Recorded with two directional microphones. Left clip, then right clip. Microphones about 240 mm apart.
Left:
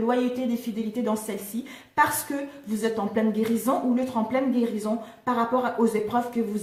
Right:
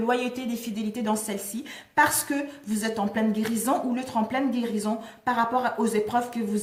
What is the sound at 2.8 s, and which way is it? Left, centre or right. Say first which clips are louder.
A woman's voice: left 2 dB; right.